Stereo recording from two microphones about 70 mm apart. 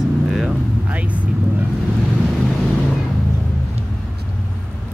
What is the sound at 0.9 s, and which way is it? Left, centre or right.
Speech, centre.